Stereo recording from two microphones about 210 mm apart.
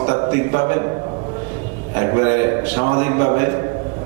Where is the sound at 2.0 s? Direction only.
20° right (ahead or behind).